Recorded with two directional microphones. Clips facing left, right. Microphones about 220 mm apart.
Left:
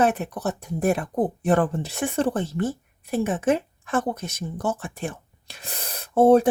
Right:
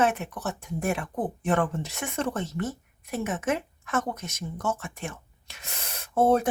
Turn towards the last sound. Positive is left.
turn(degrees=30)  # may be behind; listen again after turning